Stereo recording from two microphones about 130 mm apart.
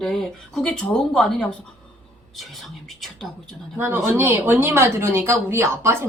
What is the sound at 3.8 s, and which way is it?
Speech, 15° right (ahead or behind).